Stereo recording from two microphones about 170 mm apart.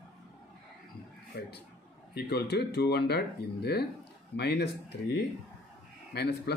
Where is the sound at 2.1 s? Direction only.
70° left (ahead or behind).